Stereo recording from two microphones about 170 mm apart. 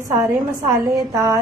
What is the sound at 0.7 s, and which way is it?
Speech, 20° right (ahead or behind).